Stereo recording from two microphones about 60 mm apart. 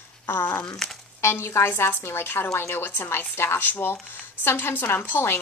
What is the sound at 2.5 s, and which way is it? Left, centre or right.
Speech, left.